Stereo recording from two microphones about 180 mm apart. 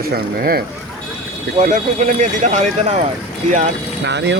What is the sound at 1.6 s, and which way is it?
Speech, 45° right (ahead or behind).